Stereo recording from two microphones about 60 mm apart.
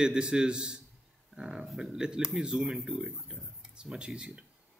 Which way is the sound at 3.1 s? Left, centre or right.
Centre.